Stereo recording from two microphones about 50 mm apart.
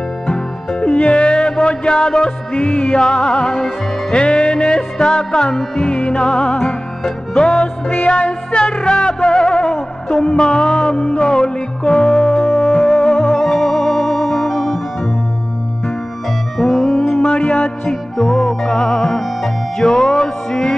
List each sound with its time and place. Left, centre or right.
0.3 s music: centre
3.0 s music: centre
13.4 s music: centre
16.5 s music: centre
17.5 s music: left
18.1 s music: centre